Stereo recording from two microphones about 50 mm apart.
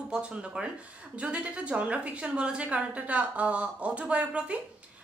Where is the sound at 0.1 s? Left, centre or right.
Right.